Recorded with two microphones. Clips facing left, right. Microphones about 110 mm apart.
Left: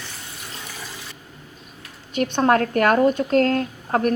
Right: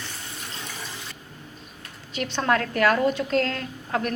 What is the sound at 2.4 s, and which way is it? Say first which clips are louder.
A woman's voice: left 4 dB; 40° left (ahead or behind).